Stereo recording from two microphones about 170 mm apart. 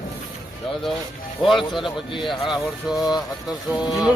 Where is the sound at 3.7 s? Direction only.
25° left (ahead or behind).